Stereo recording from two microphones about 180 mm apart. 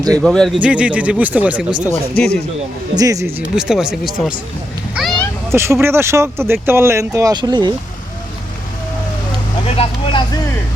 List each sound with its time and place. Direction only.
0.2 s speech: centre (ahead or behind)
2.9 s speech: 20° right (ahead or behind); by 4.4 s 5° right (ahead or behind)
4.9 s a sound: centre (ahead or behind)
5.5 s speech: 15° right (ahead or behind)
9.6 s vehicle: 30° left (ahead or behind)